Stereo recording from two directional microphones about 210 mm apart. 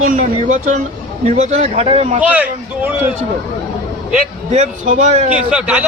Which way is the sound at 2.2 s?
5° right (ahead or behind).